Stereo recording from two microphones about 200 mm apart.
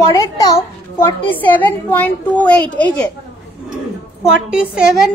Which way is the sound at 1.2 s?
10° left (ahead or behind).